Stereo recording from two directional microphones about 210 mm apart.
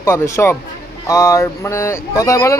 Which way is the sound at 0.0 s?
15° left (ahead or behind).